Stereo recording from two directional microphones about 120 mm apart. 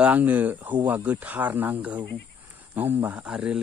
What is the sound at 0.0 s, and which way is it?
A man's voice, 15° right (ahead or behind).